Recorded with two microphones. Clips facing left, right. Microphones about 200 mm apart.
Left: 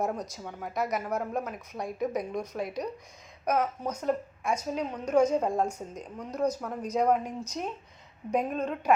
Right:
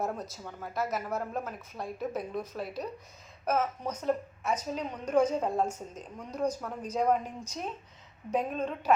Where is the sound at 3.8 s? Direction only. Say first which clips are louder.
Left 1 dB; 10° left (ahead or behind).